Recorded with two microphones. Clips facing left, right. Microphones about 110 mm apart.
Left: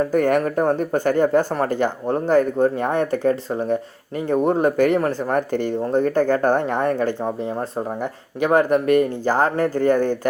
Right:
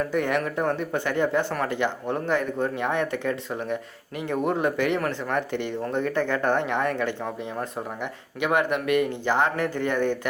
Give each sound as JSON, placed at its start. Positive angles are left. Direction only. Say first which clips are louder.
{"t": 0.0, "sound": "speech", "louder": "left 7 dB", "side_deg": 45}